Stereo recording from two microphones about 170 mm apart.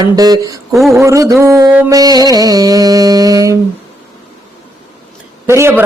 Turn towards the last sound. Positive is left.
turn(degrees=-15)  # may be behind; listen again after turning